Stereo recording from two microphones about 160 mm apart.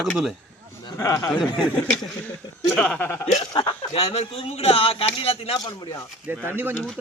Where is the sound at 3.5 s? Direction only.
35° left (ahead or behind).